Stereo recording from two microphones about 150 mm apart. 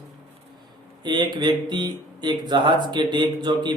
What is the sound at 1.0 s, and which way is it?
Speech, 30° right (ahead or behind).